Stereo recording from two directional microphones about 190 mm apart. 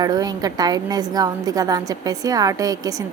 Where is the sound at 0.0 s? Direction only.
20° right (ahead or behind).